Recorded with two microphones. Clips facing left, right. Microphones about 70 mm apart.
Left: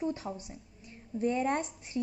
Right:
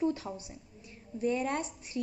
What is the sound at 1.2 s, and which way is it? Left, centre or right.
Speech, left.